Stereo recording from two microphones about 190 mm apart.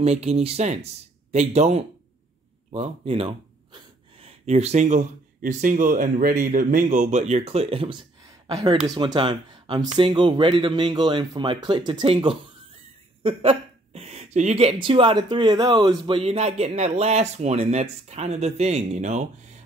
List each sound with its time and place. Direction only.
0.0 s speech: 35° right (ahead or behind)